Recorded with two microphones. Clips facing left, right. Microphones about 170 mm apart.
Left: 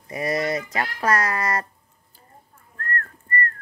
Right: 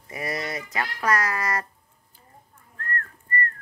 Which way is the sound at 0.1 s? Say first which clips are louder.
Left 7 dB; 25° left (ahead or behind).